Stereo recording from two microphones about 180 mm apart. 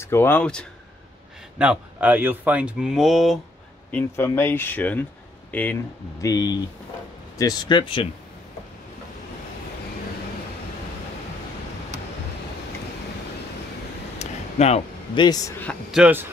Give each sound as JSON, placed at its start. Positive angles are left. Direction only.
{"t": 0.0, "sound": "speech", "side_deg": 15}
{"t": 1.6, "sound": "speech", "side_deg": -5}
{"t": 3.9, "sound": "speech", "side_deg": 10}
{"t": 6.2, "sound": "speech", "side_deg": 20}
{"t": 14.1, "sound": "a sound", "side_deg": 40}
{"t": 15.2, "sound": "speech", "side_deg": 20}
{"t": 15.9, "sound": "speech", "side_deg": -10}